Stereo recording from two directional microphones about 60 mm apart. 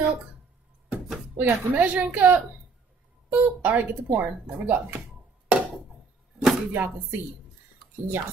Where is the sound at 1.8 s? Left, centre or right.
Right.